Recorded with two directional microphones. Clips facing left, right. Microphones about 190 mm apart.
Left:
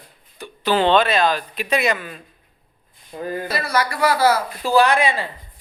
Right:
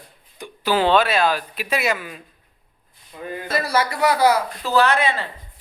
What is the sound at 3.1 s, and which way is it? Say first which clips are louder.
Speech: left 5 dB; 40° left (ahead or behind).